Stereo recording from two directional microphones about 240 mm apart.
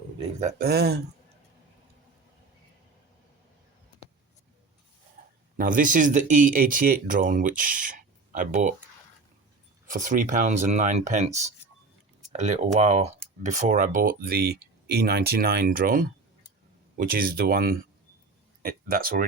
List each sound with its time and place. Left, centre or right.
0.2 s speech: right
0.7 s speech: right
5.5 s speech: right
9.8 s speech: right